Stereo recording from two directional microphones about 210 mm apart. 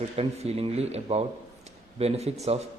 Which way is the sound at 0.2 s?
30° right (ahead or behind).